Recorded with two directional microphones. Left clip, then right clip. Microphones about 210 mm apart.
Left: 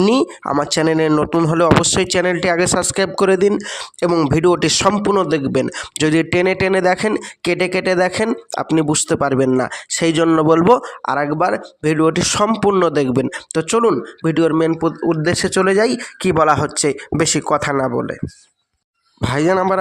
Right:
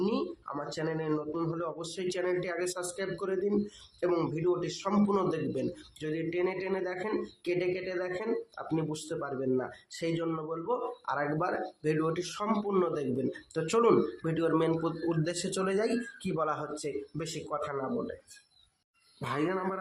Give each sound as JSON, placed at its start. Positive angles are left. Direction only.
{"t": 0.0, "sound": "speech", "side_deg": 50}
{"t": 19.2, "sound": "speech", "side_deg": 50}